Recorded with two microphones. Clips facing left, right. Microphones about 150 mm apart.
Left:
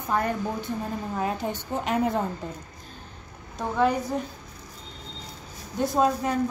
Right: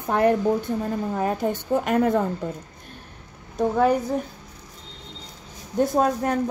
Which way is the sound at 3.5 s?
50° right (ahead or behind).